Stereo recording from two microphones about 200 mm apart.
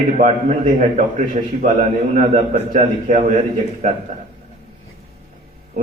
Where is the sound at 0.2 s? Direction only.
35° right (ahead or behind).